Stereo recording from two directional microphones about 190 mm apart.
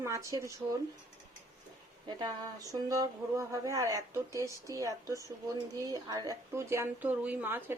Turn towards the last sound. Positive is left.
turn(degrees=-10)  # may be behind; listen again after turning